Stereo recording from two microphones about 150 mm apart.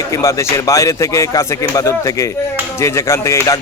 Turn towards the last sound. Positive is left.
turn(degrees=20)  # may be behind; listen again after turning